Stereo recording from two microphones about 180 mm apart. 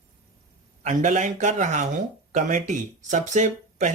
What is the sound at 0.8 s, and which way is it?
Speech, 40° right (ahead or behind).